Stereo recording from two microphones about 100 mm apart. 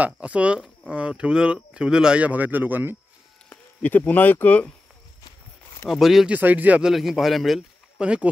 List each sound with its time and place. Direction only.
0.0 s speech: 10° right (ahead or behind)
3.4 s speech: 15° left (ahead or behind)
5.9 s speech: centre (ahead or behind)
6.3 s speech: 15° right (ahead or behind)
6.9 s speech: centre (ahead or behind)